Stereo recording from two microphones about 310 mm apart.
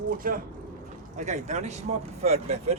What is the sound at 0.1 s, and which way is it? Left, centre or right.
Speech, right.